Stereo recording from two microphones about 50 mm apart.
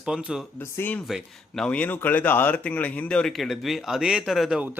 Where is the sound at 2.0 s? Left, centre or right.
Left.